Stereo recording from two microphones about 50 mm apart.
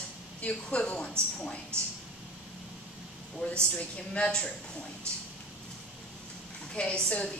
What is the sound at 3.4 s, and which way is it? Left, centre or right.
A woman's voice, left.